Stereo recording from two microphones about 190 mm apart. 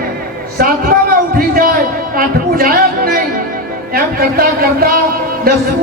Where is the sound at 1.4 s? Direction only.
50° right (ahead or behind).